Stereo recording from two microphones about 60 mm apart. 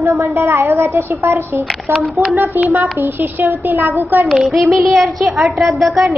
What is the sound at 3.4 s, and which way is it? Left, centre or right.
Speech, right.